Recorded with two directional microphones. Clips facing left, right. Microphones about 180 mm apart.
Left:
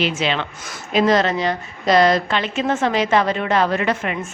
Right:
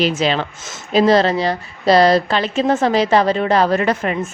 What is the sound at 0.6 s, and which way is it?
A woman's voice, 30° right (ahead or behind).